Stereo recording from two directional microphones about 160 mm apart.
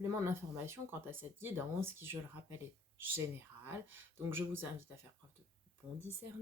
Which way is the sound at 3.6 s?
15° right (ahead or behind).